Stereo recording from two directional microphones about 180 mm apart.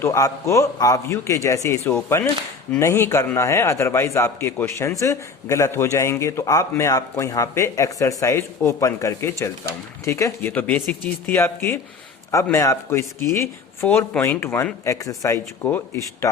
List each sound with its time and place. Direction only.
0.0 s a man's voice: 15° left (ahead or behind)